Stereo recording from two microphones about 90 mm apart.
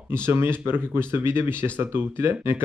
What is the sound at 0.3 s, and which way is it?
Speech, 25° right (ahead or behind).